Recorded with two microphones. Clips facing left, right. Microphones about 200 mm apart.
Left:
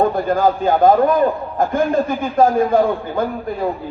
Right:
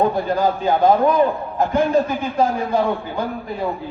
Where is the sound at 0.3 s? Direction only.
50° left (ahead or behind).